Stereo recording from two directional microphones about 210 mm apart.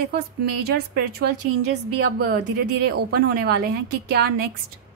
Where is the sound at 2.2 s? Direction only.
50° right (ahead or behind).